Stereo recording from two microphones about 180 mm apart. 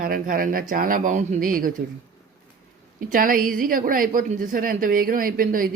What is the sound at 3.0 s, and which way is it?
A woman's voice, 50° right (ahead or behind).